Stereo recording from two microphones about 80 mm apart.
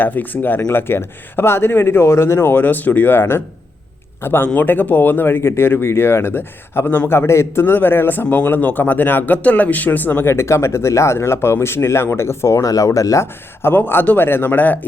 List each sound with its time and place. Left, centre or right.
0.0 s speech: left
13.6 s speech: left